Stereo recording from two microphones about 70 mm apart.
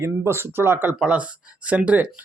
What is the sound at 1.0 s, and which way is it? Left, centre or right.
Speech, centre.